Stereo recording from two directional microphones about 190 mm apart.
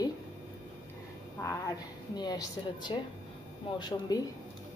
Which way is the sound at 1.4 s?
15° left (ahead or behind).